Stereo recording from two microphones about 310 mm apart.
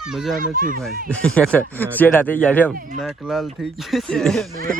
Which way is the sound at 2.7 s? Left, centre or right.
Right.